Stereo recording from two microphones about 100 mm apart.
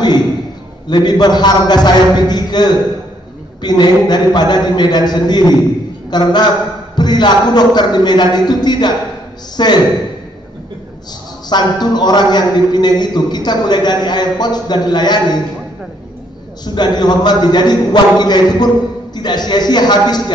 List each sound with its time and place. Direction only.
0.8 s a man's voice: 45° left (ahead or behind)
11.4 s a man's voice: 45° left (ahead or behind)
16.6 s a man's voice: 45° left (ahead or behind)